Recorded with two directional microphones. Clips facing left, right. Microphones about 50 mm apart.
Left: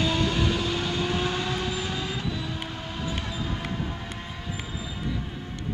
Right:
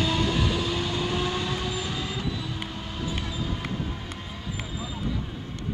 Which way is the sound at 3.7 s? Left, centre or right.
Centre.